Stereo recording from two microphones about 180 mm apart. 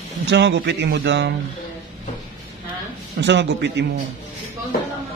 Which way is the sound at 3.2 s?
75° right (ahead or behind).